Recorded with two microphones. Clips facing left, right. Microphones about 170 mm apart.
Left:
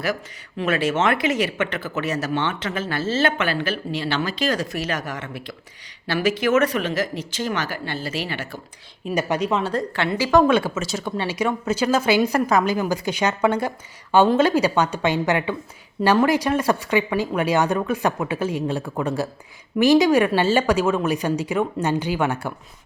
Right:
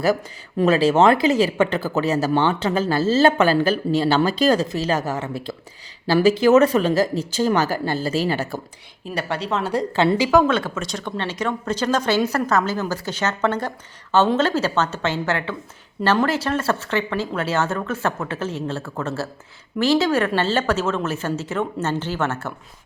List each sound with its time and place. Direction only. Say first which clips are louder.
0.5 s speech: right 5 dB; 35° right (ahead or behind)
9.5 s a woman's voice: left 1 dB; centre (ahead or behind)
10.4 s speech: left 2 dB; 10° left (ahead or behind)